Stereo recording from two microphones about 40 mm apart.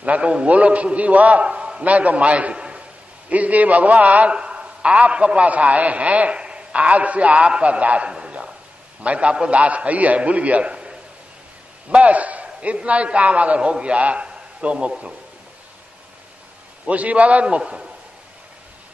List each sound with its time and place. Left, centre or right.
0.0 s a man's voice: right
8.1 s a sound: right
9.0 s a man's voice: right
11.9 s a man's voice: right
16.8 s a man's voice: right
17.6 s a man's voice: right